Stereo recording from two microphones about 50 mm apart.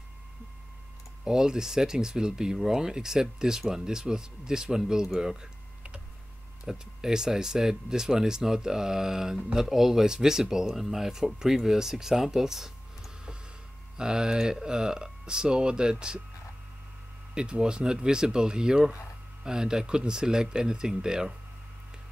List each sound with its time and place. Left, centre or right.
1.2 s speech: centre
17.3 s speech: centre